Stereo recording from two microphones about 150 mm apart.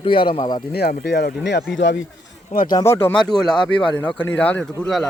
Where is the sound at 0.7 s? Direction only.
90° left.